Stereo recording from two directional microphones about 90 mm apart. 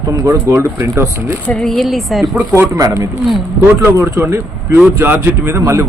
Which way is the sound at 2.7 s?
40° right (ahead or behind).